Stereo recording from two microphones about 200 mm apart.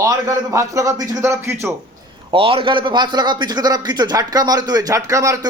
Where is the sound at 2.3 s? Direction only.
25° right (ahead or behind).